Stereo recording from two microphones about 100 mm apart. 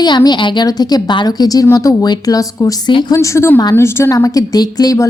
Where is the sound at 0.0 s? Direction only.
45° left (ahead or behind).